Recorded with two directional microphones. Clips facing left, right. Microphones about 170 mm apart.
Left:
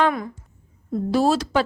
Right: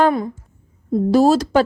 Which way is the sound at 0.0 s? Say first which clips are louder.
Right 5 dB; 30° right (ahead or behind).